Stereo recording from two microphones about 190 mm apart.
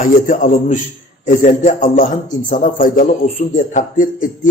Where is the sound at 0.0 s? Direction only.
45° left (ahead or behind).